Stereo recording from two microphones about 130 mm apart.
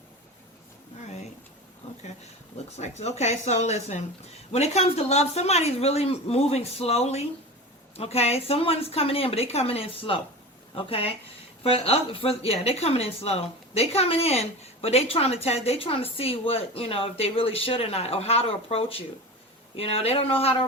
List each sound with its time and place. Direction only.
2.7 s speech: 60° left (ahead or behind)